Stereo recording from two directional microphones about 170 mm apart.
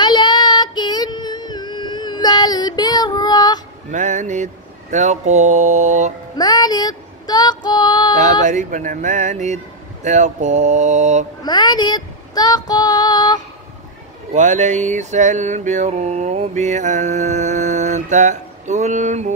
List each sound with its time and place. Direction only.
0.0 s child singing: 25° left (ahead or behind)
3.9 s music: 45° right (ahead or behind)
6.3 s female singing: 25° left (ahead or behind)
8.5 s music: 45° right (ahead or behind)
11.4 s child singing: 25° left (ahead or behind)
14.3 s music: 45° right (ahead or behind)